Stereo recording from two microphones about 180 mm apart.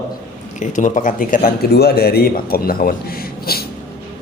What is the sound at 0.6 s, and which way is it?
Speech, 45° left (ahead or behind).